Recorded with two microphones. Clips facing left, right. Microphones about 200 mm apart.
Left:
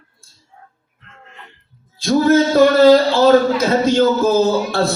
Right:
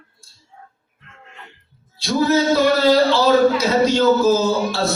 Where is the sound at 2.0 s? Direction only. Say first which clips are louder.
Left 4 dB; 50° left (ahead or behind).